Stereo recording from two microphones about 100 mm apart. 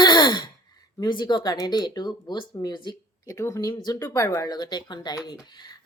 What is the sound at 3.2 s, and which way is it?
Speech, 30° left (ahead or behind).